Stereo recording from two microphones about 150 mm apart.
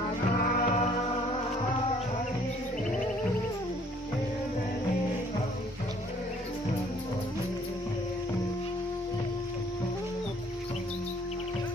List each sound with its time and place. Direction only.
0.4 s music: 65° left (ahead or behind)